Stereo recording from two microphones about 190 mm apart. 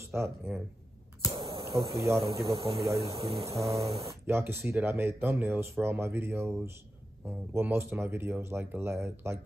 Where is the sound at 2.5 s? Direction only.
30° right (ahead or behind).